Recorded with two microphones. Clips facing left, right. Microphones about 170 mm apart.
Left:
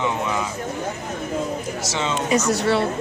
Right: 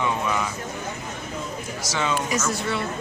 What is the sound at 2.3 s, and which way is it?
Speech, 70° left (ahead or behind).